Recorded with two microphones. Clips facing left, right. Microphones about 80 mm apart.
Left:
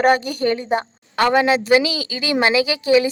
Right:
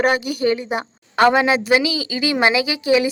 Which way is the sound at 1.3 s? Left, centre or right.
Centre.